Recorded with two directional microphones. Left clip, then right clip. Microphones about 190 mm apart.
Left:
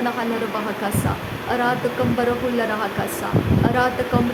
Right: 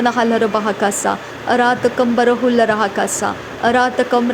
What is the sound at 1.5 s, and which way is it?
A woman's voice, 35° right (ahead or behind).